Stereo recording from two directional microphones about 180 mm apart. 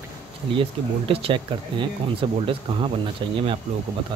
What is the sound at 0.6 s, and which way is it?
Speech, 30° right (ahead or behind).